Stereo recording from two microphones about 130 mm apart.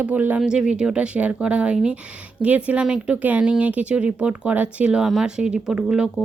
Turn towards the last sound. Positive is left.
turn(degrees=-5)  # may be behind; listen again after turning